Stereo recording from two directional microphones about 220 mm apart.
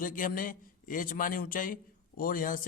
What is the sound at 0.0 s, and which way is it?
A man's voice, 40° left (ahead or behind).